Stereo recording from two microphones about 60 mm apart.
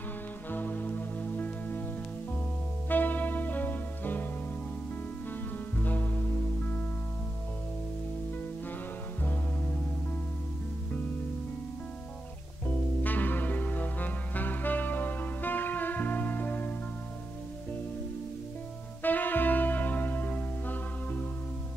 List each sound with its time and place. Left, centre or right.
0.5 s music: left
2.9 s music: left
5.8 s music: left
12.6 s music: left
19.0 s music: left